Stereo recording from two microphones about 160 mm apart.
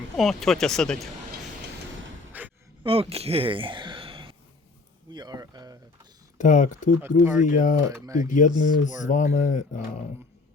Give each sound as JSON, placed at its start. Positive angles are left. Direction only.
{"t": 0.2, "sound": "speech", "side_deg": 0}
{"t": 2.3, "sound": "a sound", "side_deg": -10}
{"t": 2.8, "sound": "speech", "side_deg": -35}
{"t": 5.1, "sound": "a sound", "side_deg": -25}
{"t": 6.4, "sound": "speech", "side_deg": 50}
{"t": 7.9, "sound": "speech", "side_deg": -20}
{"t": 8.3, "sound": "speech", "side_deg": 50}